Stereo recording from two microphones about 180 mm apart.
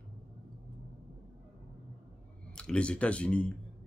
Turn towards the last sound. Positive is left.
turn(degrees=5)  # may be behind; listen again after turning